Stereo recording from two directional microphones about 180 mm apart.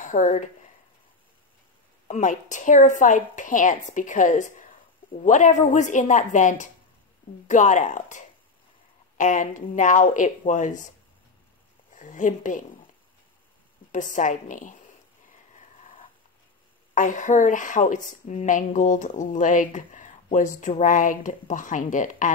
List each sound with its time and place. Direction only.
0.0 s speech: 45° left (ahead or behind)
2.0 s a woman's voice: 45° left (ahead or behind)
11.9 s a woman's voice: 45° left (ahead or behind)
13.9 s a woman's voice: 45° left (ahead or behind)
16.9 s a woman's voice: 45° left (ahead or behind)